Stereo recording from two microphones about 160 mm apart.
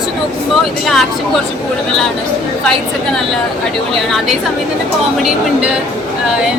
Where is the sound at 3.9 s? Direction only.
Centre (ahead or behind).